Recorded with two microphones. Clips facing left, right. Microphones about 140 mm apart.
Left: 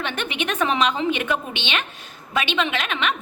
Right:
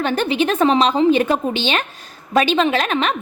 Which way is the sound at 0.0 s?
35° right (ahead or behind).